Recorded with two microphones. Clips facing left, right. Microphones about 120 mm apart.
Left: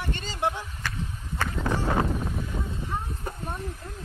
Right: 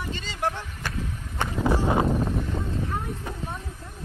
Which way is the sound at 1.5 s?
10° right (ahead or behind).